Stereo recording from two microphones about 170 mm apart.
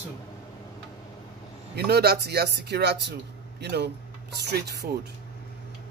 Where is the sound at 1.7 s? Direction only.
70° right (ahead or behind).